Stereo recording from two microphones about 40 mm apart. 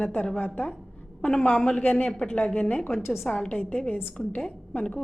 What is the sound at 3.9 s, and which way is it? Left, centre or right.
Speech, left.